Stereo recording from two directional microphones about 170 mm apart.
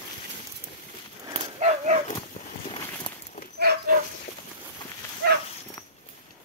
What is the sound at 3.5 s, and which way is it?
Dog, 70° right (ahead or behind).